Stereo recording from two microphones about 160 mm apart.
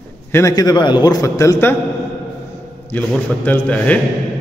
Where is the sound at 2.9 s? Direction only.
10° left (ahead or behind).